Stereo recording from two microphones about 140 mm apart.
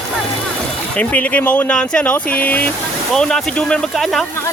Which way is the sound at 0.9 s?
10° left (ahead or behind).